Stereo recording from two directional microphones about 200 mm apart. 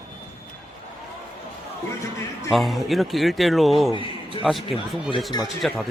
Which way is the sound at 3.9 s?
25° left (ahead or behind).